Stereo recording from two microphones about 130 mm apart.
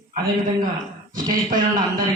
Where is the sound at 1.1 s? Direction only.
90° right.